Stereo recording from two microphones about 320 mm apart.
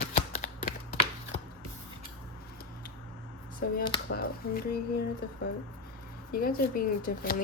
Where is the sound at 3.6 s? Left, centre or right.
Left.